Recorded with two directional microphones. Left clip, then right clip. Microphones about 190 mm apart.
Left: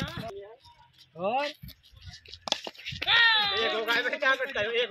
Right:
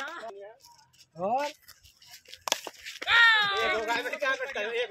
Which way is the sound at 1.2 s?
70° right (ahead or behind).